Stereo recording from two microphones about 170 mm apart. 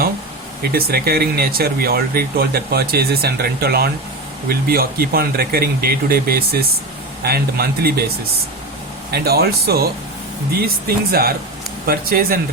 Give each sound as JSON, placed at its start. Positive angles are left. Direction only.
{"t": 0.7, "sound": "speech", "side_deg": -65}
{"t": 9.1, "sound": "speech", "side_deg": -70}